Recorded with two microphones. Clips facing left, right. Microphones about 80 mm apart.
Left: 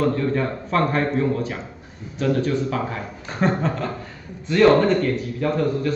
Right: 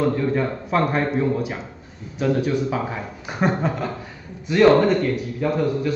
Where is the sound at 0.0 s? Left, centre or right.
Centre.